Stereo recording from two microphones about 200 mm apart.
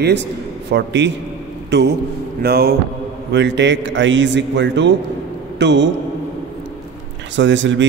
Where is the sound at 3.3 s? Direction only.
60° right (ahead or behind).